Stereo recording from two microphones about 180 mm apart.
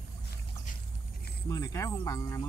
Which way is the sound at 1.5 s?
15° left (ahead or behind).